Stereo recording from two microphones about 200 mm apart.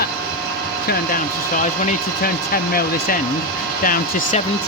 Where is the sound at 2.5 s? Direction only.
45° left (ahead or behind).